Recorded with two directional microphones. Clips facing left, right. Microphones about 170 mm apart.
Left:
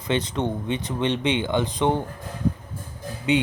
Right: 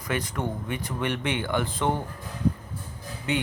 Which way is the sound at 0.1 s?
25° left (ahead or behind).